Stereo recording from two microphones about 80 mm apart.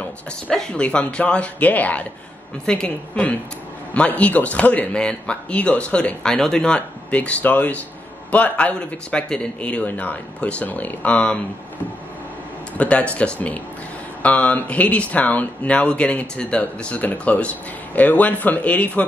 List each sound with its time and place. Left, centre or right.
0.5 s speech: centre
12.7 s speech: centre